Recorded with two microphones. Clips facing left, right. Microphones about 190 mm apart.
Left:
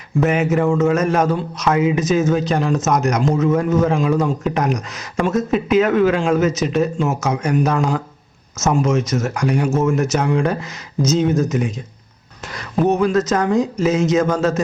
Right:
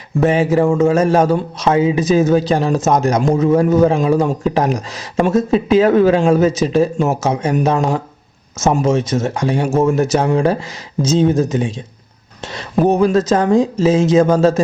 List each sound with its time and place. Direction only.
0.2 s a man's voice: 30° right (ahead or behind)